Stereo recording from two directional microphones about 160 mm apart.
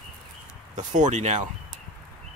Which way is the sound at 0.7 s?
50° right (ahead or behind).